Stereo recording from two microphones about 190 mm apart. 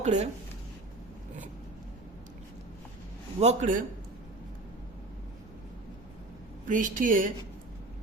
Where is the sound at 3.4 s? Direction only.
40° right (ahead or behind).